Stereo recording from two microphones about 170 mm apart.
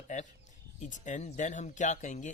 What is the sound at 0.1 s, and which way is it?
Speech, 45° left (ahead or behind).